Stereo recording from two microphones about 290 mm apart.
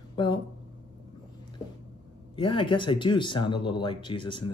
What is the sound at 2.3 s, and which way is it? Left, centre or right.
Speech, centre.